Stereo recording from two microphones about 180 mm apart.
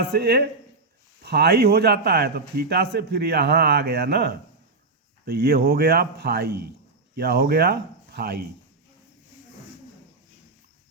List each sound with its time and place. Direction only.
0.0 s a man's voice: 65° right (ahead or behind)